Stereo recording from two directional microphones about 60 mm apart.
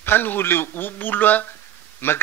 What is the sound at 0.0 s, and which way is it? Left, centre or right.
Speech, left.